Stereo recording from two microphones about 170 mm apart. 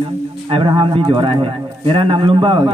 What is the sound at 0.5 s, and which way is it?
A man's voice, 30° right (ahead or behind).